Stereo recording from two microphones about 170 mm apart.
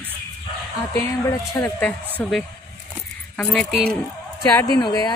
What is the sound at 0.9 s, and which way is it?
Speech, 20° left (ahead or behind).